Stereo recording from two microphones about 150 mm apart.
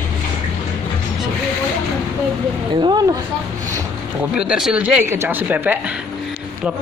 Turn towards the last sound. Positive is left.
turn(degrees=-10)  # may be behind; listen again after turning